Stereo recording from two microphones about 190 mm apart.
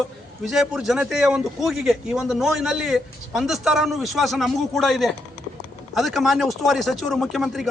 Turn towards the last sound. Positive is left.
turn(degrees=0)  # may be behind; listen again after turning